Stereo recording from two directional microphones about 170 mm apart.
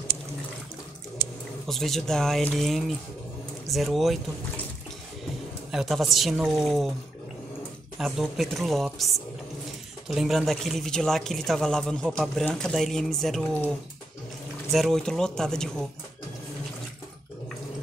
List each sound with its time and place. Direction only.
1.7 s speech: centre (ahead or behind)
5.7 s speech: centre (ahead or behind)
8.0 s speech: centre (ahead or behind)
14.7 s speech: centre (ahead or behind)